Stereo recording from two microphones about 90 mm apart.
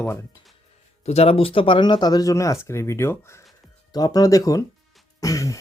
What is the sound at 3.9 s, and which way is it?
Speech, 45° left (ahead or behind).